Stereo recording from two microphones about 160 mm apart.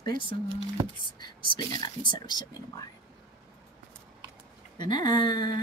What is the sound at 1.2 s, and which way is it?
Speech, 25° left (ahead or behind).